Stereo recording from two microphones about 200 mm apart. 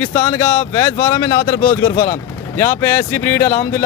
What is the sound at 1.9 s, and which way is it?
Speech, 45° left (ahead or behind).